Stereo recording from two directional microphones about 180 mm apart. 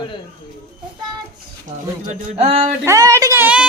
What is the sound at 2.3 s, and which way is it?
Speech, 35° right (ahead or behind).